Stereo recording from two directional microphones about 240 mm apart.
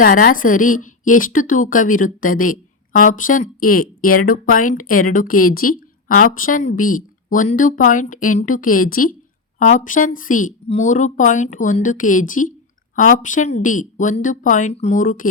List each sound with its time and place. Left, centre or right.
0.0 s speech: left
5.5 s a sound: left
6.4 s speech: left